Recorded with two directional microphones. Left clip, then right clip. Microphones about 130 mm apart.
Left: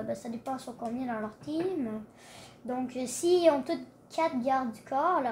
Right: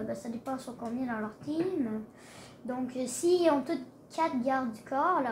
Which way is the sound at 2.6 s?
50° left (ahead or behind).